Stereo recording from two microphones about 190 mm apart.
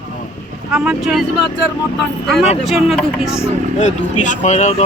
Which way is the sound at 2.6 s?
Centre (ahead or behind).